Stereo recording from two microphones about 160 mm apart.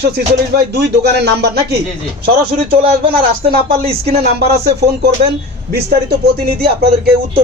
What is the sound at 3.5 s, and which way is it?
Speech, 65° right (ahead or behind).